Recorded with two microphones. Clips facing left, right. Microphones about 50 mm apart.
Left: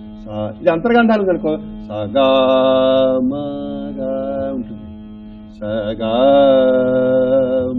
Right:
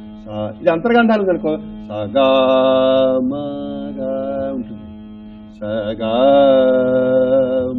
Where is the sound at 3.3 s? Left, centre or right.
Centre.